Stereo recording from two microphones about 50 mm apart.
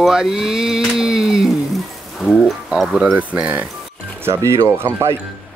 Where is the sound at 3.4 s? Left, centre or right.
Right.